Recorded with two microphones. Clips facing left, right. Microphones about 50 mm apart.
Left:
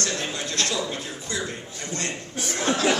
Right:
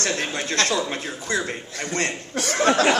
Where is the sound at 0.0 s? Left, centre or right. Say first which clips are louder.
Right 3 dB; right.